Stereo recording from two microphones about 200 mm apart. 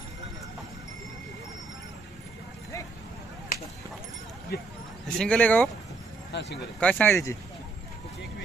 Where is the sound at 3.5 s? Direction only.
45° left (ahead or behind).